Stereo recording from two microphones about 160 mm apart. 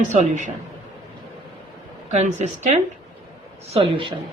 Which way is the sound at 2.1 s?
45° right (ahead or behind).